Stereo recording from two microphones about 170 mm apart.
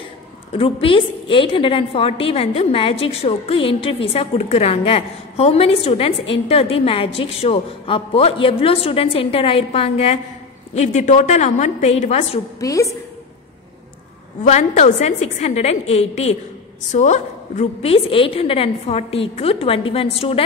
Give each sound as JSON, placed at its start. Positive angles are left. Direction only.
{"t": 0.5, "sound": "a woman's voice", "side_deg": 35}
{"t": 12.5, "sound": "a woman's voice", "side_deg": 20}
{"t": 14.4, "sound": "a woman's voice", "side_deg": 45}